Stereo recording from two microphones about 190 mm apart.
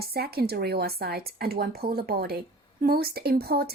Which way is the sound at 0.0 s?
55° right (ahead or behind).